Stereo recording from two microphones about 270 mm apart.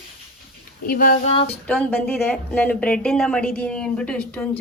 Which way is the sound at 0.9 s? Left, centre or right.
Left.